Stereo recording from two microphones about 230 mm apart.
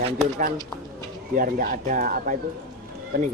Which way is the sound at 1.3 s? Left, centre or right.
Right.